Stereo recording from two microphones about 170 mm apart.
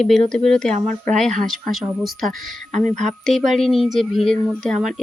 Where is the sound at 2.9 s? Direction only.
45° right (ahead or behind).